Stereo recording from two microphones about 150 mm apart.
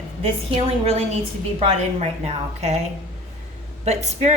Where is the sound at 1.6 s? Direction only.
40° right (ahead or behind).